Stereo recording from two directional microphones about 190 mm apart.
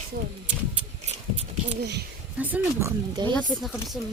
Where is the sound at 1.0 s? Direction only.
35° right (ahead or behind).